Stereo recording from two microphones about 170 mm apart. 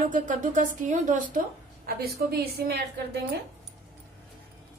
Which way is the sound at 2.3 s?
70° right (ahead or behind).